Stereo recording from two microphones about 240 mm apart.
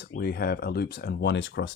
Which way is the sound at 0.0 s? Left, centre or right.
Left.